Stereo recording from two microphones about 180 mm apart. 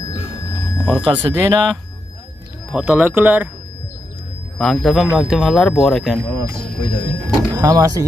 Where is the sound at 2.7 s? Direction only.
5° right (ahead or behind).